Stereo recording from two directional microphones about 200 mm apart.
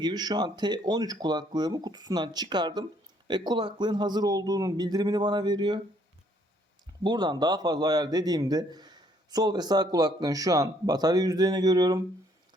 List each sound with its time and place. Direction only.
0.0 s a man's voice: 20° right (ahead or behind)
7.0 s a man's voice: 20° right (ahead or behind)